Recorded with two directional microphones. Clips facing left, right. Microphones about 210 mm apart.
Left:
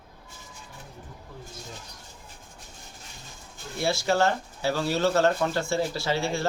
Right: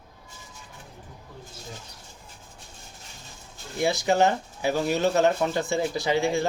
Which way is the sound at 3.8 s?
20° right (ahead or behind).